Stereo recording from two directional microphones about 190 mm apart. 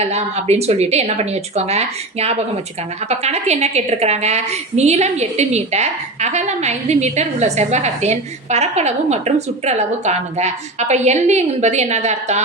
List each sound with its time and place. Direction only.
0.0 s a woman's voice: 35° right (ahead or behind)